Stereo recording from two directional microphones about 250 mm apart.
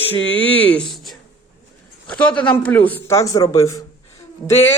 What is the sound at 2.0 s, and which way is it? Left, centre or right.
A man's voice, centre.